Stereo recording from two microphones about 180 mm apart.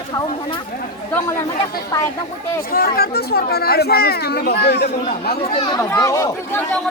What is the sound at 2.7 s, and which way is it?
Speech, 55° left (ahead or behind).